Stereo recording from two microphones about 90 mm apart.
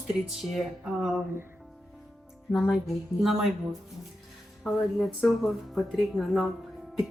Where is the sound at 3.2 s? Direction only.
Centre (ahead or behind).